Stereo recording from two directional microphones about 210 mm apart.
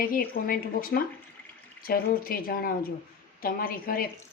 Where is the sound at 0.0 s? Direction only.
45° left (ahead or behind).